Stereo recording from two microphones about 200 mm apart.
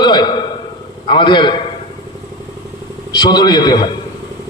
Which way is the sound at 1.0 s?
25° left (ahead or behind).